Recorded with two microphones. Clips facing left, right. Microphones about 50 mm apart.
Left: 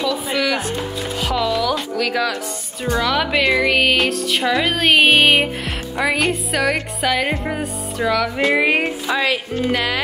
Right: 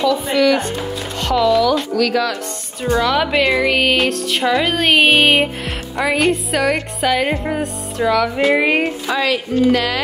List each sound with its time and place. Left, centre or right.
0.0 s music: centre
2.0 s speech: centre
2.9 s music: centre
9.0 s speech: centre